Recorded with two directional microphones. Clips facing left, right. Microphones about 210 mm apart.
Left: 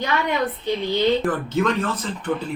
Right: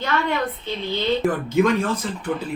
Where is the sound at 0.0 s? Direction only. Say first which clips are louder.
Left 1 dB; 15° left (ahead or behind).